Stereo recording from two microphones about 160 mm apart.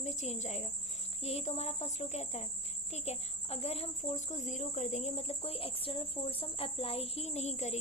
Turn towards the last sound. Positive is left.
turn(degrees=45)  # may be behind; listen again after turning